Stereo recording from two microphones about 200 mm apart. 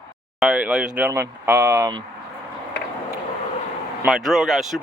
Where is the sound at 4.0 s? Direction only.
Centre (ahead or behind).